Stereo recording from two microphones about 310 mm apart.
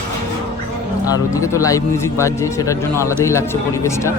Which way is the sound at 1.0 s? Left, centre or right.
Centre.